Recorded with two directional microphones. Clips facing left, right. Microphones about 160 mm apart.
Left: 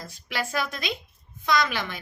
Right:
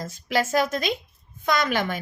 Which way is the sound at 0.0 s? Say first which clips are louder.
Right 7 dB; 40° right (ahead or behind).